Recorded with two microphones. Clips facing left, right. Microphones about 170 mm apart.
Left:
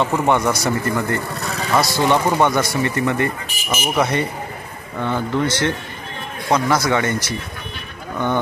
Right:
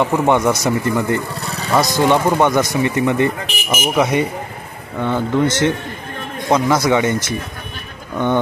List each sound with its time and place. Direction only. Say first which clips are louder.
0.0 s speech: right 3 dB; 15° right (ahead or behind)